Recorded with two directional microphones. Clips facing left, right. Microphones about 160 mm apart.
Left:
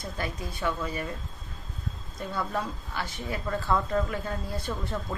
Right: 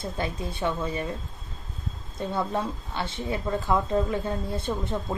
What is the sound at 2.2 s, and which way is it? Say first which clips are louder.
A woman's voice: right 4 dB; 25° right (ahead or behind).